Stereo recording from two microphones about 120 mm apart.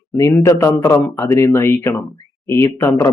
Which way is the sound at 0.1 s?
25° left (ahead or behind).